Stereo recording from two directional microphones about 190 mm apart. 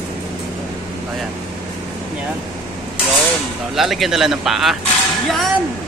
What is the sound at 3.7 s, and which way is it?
Speech, centre (ahead or behind).